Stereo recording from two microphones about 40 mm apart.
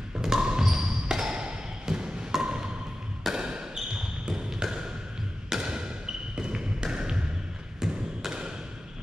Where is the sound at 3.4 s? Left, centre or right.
Centre.